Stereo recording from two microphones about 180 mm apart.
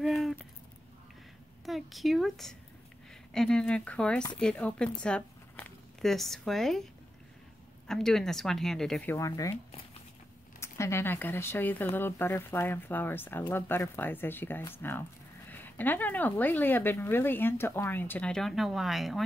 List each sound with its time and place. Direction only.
0.0 s a sound: centre (ahead or behind)
1.7 s speech: centre (ahead or behind)
5.0 s a sound: 5° left (ahead or behind)
7.8 s speech: centre (ahead or behind)
9.1 s speech: 15° left (ahead or behind)
10.6 s speech: 15° left (ahead or behind)